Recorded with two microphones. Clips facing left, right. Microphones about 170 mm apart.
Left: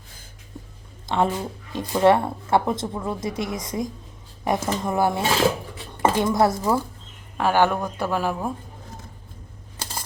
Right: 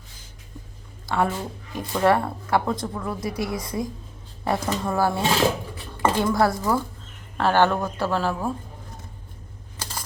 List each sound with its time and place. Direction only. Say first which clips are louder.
1.0 s speech: left 2 dB; 20° left (ahead or behind)